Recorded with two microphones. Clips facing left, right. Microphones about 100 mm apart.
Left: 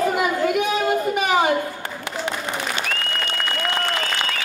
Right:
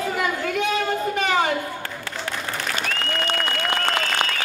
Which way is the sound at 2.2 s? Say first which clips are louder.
Left 3 dB; 20° left (ahead or behind).